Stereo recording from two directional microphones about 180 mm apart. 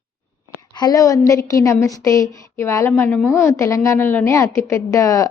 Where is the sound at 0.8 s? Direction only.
20° left (ahead or behind).